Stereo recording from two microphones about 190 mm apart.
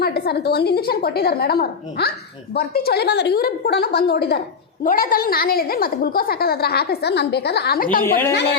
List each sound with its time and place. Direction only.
0.0 s a woman's voice: 55° left (ahead or behind)
8.3 s a woman's voice: 60° left (ahead or behind)